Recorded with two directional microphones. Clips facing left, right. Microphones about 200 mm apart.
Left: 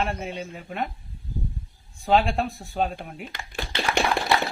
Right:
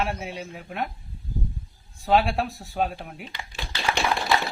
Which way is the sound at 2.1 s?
5° right (ahead or behind).